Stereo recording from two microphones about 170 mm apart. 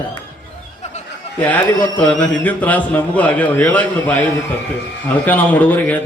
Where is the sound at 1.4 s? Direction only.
10° left (ahead or behind).